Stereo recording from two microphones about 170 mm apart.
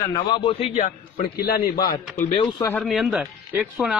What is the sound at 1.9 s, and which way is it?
Speech, 25° left (ahead or behind).